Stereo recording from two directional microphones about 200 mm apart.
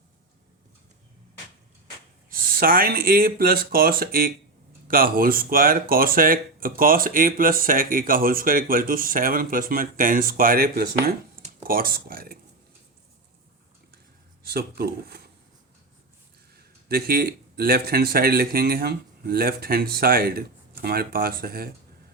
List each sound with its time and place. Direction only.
2.3 s speech: 45° right (ahead or behind)
14.4 s speech: 50° right (ahead or behind)
16.6 s speech: 50° right (ahead or behind)